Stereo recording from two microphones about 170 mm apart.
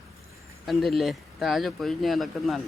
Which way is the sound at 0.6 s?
Centre (ahead or behind).